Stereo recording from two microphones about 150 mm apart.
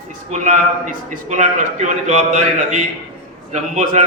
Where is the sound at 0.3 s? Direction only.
55° right (ahead or behind).